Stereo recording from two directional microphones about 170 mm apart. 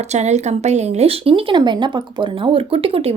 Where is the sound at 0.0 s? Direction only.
40° right (ahead or behind).